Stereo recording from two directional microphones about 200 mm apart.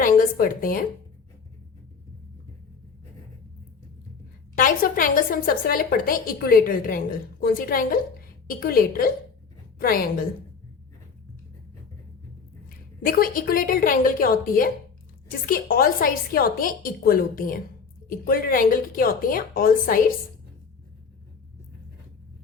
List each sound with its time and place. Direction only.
0.0 s a woman's voice: 45° left (ahead or behind)
4.5 s a woman's voice: 45° left (ahead or behind)
13.1 s a woman's voice: 45° left (ahead or behind)